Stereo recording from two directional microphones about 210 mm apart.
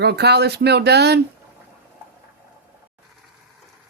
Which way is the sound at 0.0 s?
50° right (ahead or behind).